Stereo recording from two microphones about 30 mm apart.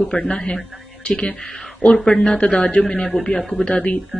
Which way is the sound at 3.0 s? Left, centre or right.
Left.